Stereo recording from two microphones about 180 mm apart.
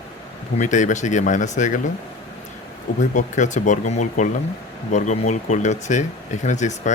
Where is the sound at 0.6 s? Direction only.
45° left (ahead or behind).